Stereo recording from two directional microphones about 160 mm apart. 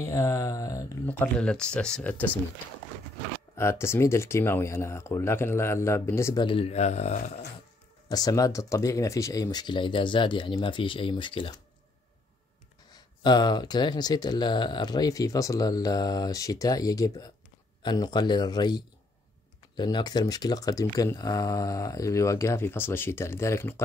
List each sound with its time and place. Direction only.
0.0 s speech: 20° left (ahead or behind)
1.0 s speech: 10° left (ahead or behind)
3.5 s speech: 15° left (ahead or behind)
6.4 s speech: 35° left (ahead or behind)
8.1 s speech: 25° left (ahead or behind)
12.9 s speech: 25° left (ahead or behind)